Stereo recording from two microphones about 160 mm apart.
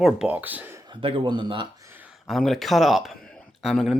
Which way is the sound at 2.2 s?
Centre (ahead or behind).